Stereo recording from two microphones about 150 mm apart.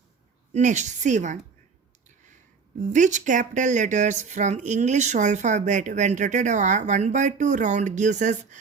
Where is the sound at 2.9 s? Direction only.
55° right (ahead or behind).